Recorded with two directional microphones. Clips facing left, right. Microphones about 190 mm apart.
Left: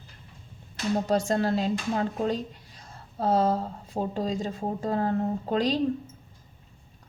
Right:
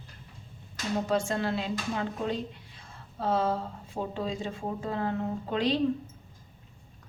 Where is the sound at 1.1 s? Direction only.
40° left (ahead or behind).